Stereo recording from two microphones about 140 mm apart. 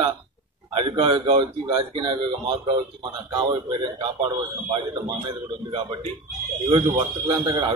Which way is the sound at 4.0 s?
35° right (ahead or behind).